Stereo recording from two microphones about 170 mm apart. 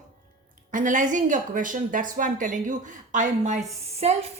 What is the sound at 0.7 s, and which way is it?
Speech, 50° right (ahead or behind).